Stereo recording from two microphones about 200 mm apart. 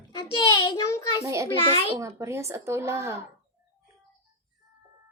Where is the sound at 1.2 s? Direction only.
15° right (ahead or behind).